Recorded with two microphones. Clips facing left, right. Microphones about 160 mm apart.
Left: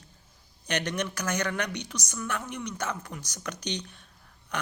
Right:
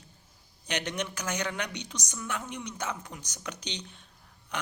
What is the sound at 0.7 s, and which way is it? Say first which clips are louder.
A woman's voice: left 3 dB; 15° right (ahead or behind).